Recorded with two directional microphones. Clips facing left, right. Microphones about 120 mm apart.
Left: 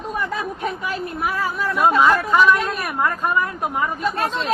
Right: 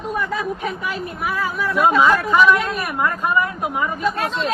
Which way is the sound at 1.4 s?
Centre (ahead or behind).